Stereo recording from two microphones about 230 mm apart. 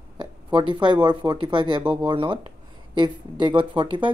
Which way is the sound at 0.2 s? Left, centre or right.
Right.